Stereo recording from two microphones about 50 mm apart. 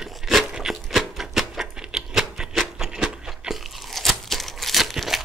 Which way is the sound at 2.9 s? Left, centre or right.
Centre.